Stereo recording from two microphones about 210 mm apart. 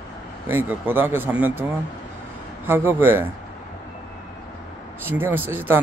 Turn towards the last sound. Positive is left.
turn(degrees=-10)  # may be behind; listen again after turning